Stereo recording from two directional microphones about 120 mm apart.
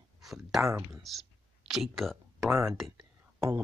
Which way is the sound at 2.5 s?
20° right (ahead or behind).